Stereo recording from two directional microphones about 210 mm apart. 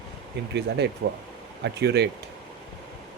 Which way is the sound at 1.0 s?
65° right (ahead or behind).